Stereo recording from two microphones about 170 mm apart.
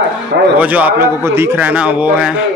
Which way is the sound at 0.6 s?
10° right (ahead or behind).